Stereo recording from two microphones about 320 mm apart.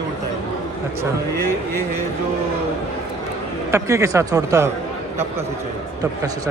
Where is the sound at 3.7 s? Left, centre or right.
Centre.